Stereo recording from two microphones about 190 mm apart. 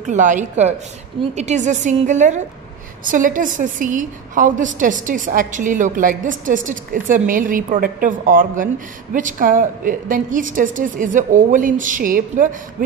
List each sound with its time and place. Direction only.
0.0 s a woman's voice: 40° right (ahead or behind)